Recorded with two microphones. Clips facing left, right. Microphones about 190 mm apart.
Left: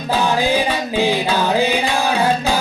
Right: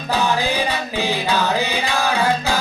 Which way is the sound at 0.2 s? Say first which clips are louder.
Left 3 dB; 15° left (ahead or behind).